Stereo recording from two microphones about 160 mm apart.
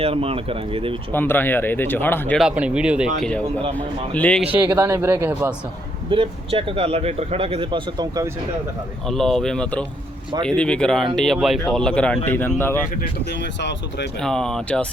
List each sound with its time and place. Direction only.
0.0 s speech: 35° right (ahead or behind)
1.1 s speech: 15° left (ahead or behind)
2.4 s speech: 5° right (ahead or behind)
3.2 s speech: 5° left (ahead or behind)
4.5 s speech: 10° right (ahead or behind)
6.1 s speech: 35° right (ahead or behind)
9.0 s speech: centre (ahead or behind)
13.0 s speech: 85° left
14.2 s speech: 5° left (ahead or behind)